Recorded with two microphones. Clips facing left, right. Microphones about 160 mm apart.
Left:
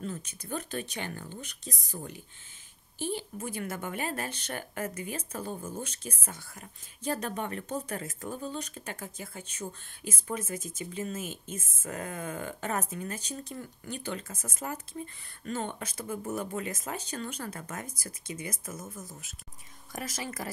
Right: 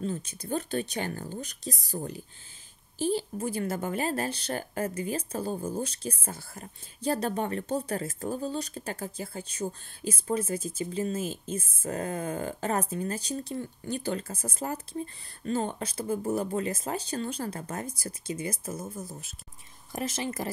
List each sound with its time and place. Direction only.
0.0 s speech: 30° right (ahead or behind)